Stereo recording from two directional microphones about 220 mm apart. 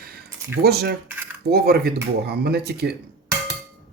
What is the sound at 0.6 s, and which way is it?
Speech, 45° right (ahead or behind).